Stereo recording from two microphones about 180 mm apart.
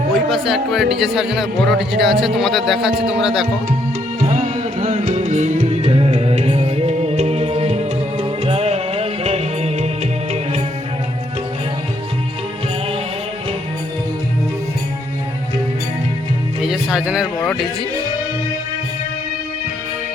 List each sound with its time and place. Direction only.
0.3 s speech: centre (ahead or behind)
4.2 s music: 40° right (ahead or behind)
16.6 s music: 5° right (ahead or behind)